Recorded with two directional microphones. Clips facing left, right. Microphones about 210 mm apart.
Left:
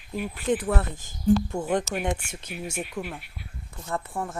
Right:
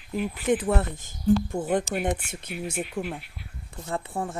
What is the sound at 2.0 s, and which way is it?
Speech, 55° right (ahead or behind).